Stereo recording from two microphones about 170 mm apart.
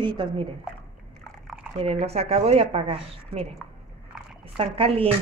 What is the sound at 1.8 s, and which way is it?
A woman's voice, 35° right (ahead or behind).